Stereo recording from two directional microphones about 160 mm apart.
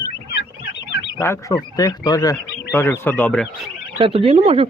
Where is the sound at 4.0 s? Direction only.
35° right (ahead or behind).